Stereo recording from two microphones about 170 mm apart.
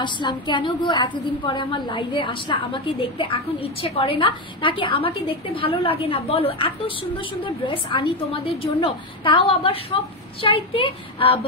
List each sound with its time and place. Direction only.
0.0 s a woman's voice: 25° left (ahead or behind)